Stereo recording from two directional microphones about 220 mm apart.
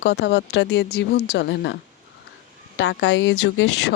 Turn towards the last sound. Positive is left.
turn(degrees=55)  # may be behind; listen again after turning